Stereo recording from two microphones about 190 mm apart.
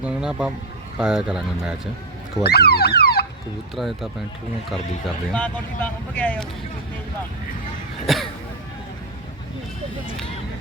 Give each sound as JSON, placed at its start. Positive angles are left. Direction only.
{"t": 0.0, "sound": "speech", "side_deg": -5}
{"t": 2.4, "sound": "speech", "side_deg": 60}
{"t": 3.8, "sound": "speech", "side_deg": 0}
{"t": 8.0, "sound": "speech", "side_deg": 0}